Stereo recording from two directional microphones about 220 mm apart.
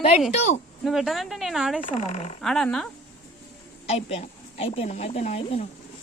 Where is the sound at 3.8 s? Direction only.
30° left (ahead or behind).